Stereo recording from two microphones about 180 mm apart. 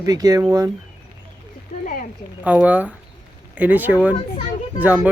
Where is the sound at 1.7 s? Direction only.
40° left (ahead or behind).